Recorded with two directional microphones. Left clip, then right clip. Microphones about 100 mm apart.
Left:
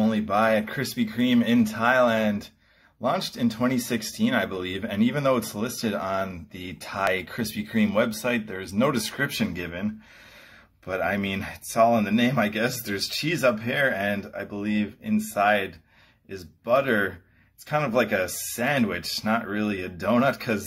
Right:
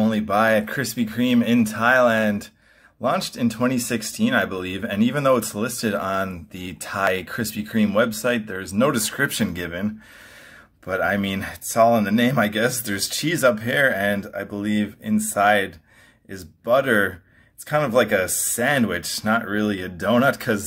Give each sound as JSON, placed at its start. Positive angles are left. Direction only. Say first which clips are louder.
{"t": 0.0, "sound": "speech", "louder": "right 3 dB", "side_deg": -20}
{"t": 10.9, "sound": "speech", "louder": "right 4 dB", "side_deg": -20}